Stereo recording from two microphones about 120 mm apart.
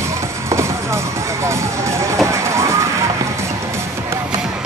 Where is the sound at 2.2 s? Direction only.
25° right (ahead or behind).